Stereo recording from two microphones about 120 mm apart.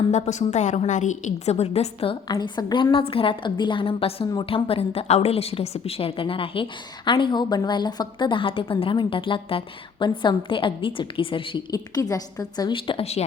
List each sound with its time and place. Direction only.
0.1 s a woman's voice: 75° left (ahead or behind); by 2.1 s 55° left (ahead or behind)
2.2 s a woman's voice: 35° left (ahead or behind)
2.9 s a woman's voice: 50° left (ahead or behind)
11.7 s a woman's voice: 30° left (ahead or behind); by 13.2 s 55° left (ahead or behind)